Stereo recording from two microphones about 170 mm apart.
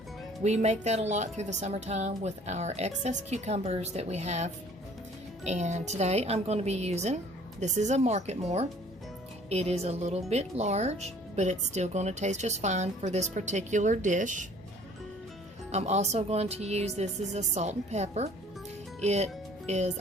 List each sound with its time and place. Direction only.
0.4 s speech: 40° right (ahead or behind)
15.7 s speech: 40° right (ahead or behind)